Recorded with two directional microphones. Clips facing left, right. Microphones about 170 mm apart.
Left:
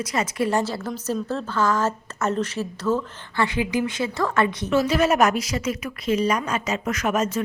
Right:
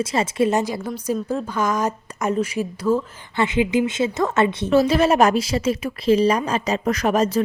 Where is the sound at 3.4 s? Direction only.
20° right (ahead or behind).